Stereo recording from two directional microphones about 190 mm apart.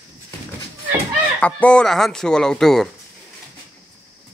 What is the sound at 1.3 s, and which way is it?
Speech, 5° left (ahead or behind).